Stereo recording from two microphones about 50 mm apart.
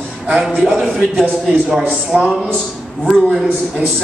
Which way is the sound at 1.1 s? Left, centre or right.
Right.